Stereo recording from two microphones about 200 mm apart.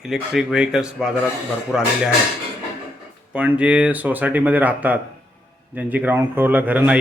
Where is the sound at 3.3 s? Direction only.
5° right (ahead or behind).